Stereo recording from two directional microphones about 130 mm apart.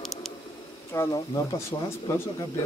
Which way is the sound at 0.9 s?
20° left (ahead or behind).